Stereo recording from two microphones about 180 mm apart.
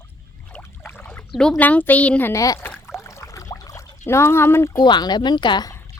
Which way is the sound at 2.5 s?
5° left (ahead or behind).